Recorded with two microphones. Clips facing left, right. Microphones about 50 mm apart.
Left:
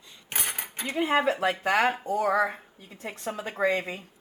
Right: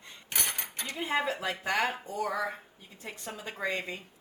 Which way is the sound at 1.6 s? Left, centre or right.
Left.